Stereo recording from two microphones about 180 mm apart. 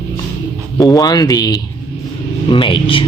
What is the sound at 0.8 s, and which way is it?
Speech, 20° left (ahead or behind).